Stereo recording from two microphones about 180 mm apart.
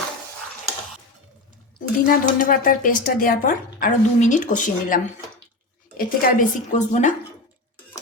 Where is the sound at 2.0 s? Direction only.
50° left (ahead or behind).